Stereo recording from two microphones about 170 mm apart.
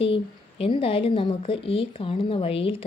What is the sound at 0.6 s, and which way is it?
A woman's voice, 30° left (ahead or behind).